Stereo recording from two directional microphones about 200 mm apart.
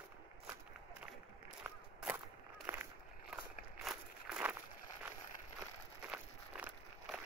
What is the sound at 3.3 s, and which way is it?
Walk, 5° right (ahead or behind).